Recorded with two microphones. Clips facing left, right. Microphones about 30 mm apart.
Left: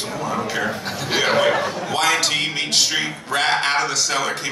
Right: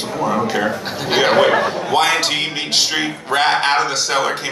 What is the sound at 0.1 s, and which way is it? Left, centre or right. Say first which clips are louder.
A man's voice: right 7 dB; right.